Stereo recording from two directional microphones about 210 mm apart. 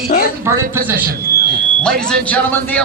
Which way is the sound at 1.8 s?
5° left (ahead or behind).